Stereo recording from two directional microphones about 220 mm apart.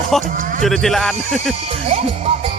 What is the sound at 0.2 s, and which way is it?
Speech, 35° right (ahead or behind).